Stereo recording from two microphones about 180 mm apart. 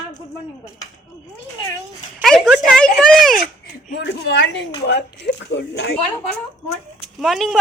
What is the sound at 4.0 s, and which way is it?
Speech, 75° left (ahead or behind).